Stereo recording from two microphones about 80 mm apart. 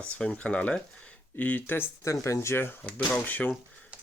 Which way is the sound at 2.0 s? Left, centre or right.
Left.